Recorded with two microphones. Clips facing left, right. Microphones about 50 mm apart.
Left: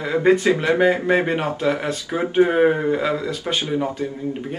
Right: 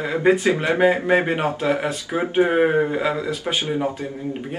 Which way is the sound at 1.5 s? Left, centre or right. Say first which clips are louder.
Even; centre.